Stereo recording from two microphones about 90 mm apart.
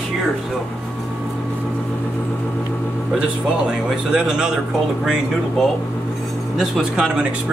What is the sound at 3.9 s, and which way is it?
Speech, 10° right (ahead or behind).